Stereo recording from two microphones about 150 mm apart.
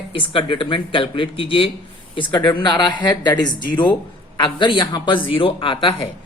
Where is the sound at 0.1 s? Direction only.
35° left (ahead or behind).